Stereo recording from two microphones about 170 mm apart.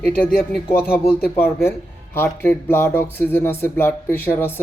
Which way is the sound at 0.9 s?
15° left (ahead or behind).